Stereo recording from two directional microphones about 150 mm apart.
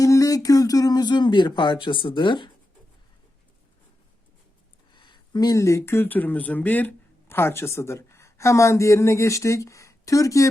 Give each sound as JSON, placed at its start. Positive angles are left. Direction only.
{"t": 0.0, "sound": "speech", "side_deg": 25}
{"t": 4.9, "sound": "speech", "side_deg": 30}